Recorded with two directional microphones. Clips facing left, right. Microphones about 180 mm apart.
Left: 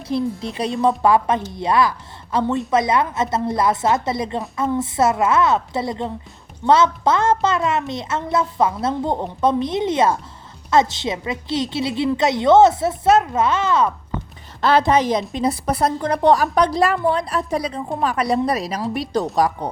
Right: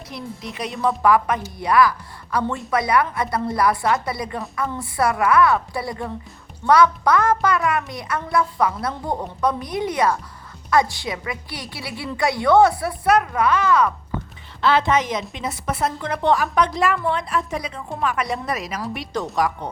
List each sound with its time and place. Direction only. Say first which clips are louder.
0.1 s a woman's voice: left 11 dB; 30° left (ahead or behind)
14.6 s a woman's voice: left 3 dB; 40° left (ahead or behind)